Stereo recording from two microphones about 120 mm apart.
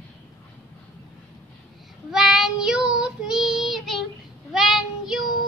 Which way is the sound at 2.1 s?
5° right (ahead or behind).